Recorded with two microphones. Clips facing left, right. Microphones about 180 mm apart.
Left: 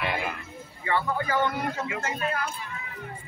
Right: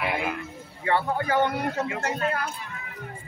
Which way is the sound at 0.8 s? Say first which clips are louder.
Right 3 dB; 60° right (ahead or behind).